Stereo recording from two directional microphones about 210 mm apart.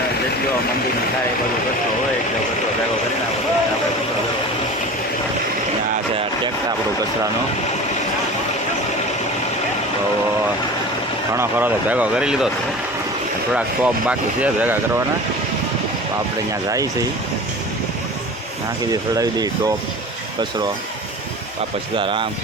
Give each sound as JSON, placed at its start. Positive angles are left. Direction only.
{"t": 11.3, "sound": "speech", "side_deg": -10}
{"t": 13.8, "sound": "speech", "side_deg": -5}
{"t": 16.6, "sound": "speech", "side_deg": -15}
{"t": 18.9, "sound": "speech", "side_deg": -15}
{"t": 21.9, "sound": "speech", "side_deg": -25}